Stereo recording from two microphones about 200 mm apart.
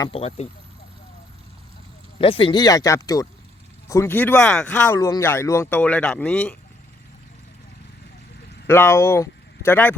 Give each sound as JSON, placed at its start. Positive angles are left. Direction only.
{"t": 0.1, "sound": "speech", "side_deg": 30}
{"t": 2.1, "sound": "speech", "side_deg": 25}
{"t": 8.6, "sound": "speech", "side_deg": 10}